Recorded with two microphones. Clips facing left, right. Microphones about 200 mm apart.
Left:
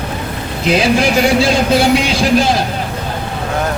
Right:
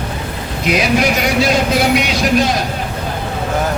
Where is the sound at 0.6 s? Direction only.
30° left (ahead or behind).